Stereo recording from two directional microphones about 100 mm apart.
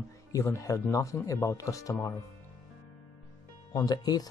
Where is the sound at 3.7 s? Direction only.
40° left (ahead or behind).